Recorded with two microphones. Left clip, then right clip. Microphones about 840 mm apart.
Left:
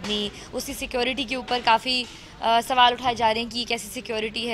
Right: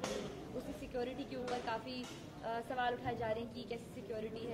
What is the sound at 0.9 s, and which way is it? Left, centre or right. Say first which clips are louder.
A woman's voice: left 17 dB; left.